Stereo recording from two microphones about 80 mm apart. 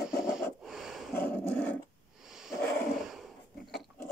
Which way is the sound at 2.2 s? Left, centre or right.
Centre.